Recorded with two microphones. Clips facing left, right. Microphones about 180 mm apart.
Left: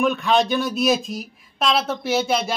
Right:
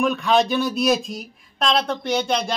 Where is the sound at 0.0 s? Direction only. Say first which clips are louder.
Even; centre (ahead or behind).